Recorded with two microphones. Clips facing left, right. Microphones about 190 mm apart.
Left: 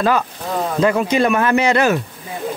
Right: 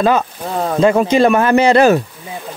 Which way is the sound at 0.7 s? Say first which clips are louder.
Right 5 dB; 30° right (ahead or behind).